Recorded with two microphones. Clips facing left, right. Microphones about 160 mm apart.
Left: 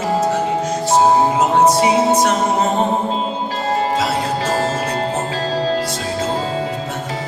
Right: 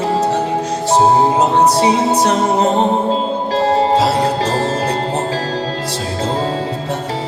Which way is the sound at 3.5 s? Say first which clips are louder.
Right 7 dB; 30° right (ahead or behind).